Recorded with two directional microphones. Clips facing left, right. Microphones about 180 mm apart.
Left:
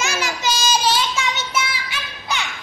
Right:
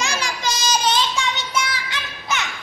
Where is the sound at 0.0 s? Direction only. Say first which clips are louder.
Left 2 dB; 5° left (ahead or behind).